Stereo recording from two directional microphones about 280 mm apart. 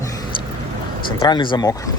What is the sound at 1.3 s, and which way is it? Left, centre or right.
Speech, centre.